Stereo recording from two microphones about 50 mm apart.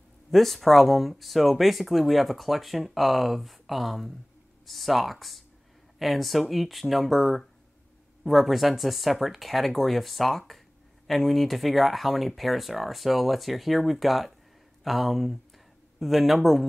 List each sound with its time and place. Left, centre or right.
0.3 s speech: centre